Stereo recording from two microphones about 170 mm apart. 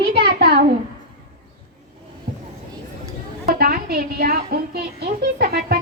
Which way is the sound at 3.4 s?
60° right (ahead or behind).